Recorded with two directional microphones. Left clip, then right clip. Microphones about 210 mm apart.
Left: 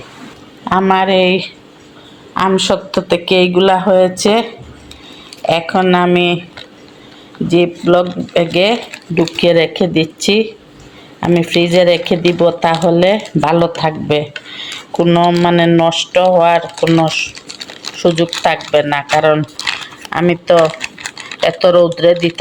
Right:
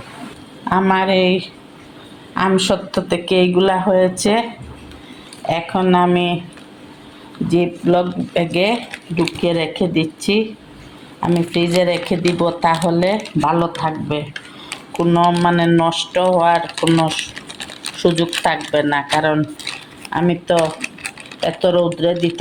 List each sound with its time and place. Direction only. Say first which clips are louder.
0.7 s speech: left 4 dB; 20° left (ahead or behind)
5.5 s speech: left 5 dB; 35° left (ahead or behind)
7.4 s speech: left 5 dB; 25° left (ahead or behind)
13.0 s speech: left 5 dB; 35° left (ahead or behind)